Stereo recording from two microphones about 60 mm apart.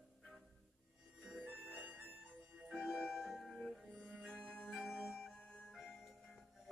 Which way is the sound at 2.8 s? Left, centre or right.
Centre.